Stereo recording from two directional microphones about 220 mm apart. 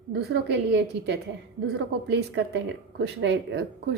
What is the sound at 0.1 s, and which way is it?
A woman's voice, 50° right (ahead or behind).